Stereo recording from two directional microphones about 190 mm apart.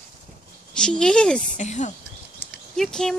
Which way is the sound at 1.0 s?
5° left (ahead or behind).